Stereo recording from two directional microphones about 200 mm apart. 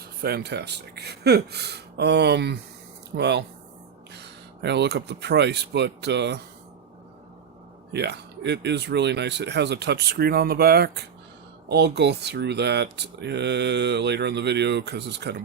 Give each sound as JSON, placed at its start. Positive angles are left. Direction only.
{"t": 0.2, "sound": "speech", "side_deg": -50}
{"t": 7.9, "sound": "speech", "side_deg": -55}